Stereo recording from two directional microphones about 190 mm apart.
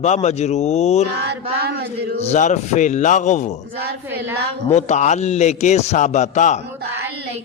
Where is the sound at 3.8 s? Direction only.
60° right (ahead or behind).